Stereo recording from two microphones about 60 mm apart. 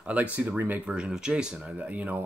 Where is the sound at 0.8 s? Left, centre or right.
Centre.